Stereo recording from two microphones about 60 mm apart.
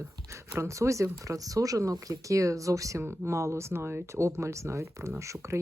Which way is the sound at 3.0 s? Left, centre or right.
Right.